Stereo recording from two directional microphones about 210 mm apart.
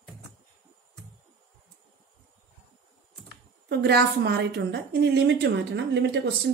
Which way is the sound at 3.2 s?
50° right (ahead or behind).